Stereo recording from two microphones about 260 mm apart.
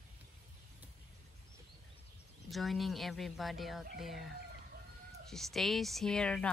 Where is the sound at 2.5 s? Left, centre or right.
Centre.